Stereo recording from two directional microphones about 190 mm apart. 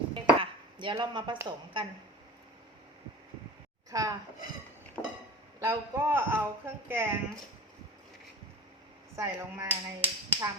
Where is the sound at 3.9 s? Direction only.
20° right (ahead or behind).